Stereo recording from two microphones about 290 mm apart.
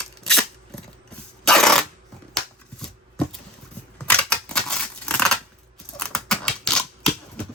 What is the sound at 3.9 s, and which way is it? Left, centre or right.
Scissors, centre.